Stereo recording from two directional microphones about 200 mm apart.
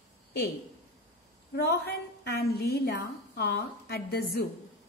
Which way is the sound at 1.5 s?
50° left (ahead or behind).